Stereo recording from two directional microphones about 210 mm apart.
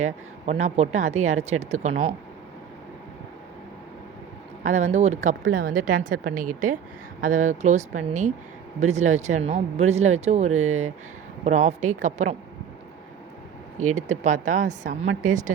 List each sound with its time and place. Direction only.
0.6 s a woman's voice: 35° right (ahead or behind)
4.6 s a woman's voice: 35° right (ahead or behind)
10.5 s speech: 80° right
11.4 s a woman's voice: 35° right (ahead or behind)
13.9 s a woman's voice: 35° right (ahead or behind)